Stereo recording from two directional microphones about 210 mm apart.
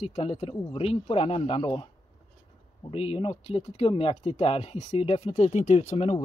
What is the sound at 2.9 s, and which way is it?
Speech, 25° left (ahead or behind).